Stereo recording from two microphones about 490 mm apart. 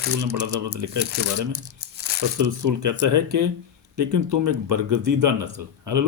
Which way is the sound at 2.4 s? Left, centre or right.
Right.